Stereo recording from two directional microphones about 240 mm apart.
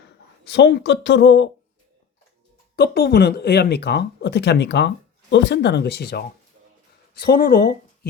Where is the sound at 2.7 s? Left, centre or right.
Left.